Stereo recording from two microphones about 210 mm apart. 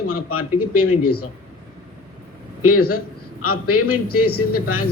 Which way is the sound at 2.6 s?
90° left.